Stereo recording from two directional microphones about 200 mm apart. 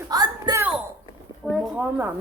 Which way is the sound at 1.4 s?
Centre (ahead or behind).